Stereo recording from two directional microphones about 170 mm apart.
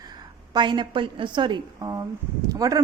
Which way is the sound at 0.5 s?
25° right (ahead or behind).